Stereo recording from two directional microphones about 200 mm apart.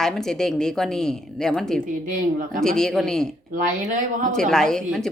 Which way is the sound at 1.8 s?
40° right (ahead or behind).